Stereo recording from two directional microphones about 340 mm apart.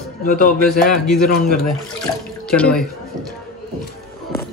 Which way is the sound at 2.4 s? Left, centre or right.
Centre.